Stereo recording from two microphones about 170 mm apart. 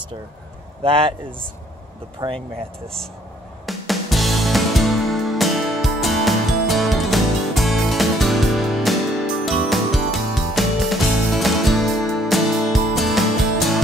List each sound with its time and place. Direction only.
0.8 s speech: 30° right (ahead or behind)
2.2 s speech: 20° right (ahead or behind)
3.6 s music: centre (ahead or behind)